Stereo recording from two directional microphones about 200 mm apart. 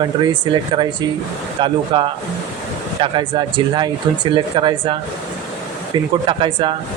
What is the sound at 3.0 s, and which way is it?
Speech, 25° right (ahead or behind).